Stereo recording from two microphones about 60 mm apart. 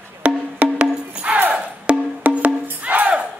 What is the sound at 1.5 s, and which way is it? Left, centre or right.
Wood block, right.